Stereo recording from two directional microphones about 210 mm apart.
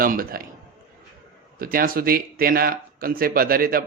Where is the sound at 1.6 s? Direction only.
45° right (ahead or behind).